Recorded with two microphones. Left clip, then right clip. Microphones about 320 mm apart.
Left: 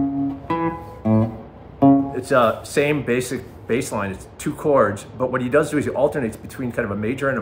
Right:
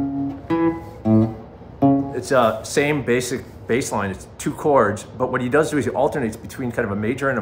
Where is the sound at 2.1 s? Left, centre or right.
Centre.